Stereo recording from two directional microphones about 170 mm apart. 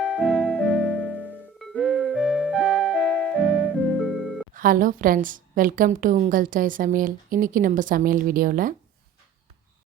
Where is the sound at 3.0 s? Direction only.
10° left (ahead or behind).